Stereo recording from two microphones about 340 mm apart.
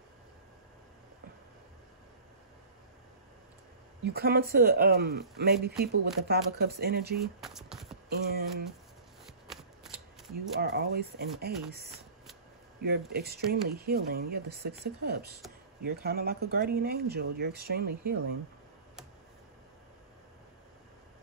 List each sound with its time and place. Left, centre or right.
4.0 s speech: right
7.3 s a sound: centre
8.3 s speech: right
9.2 s shuffling cards: centre
10.3 s speech: right
13.1 s speech: right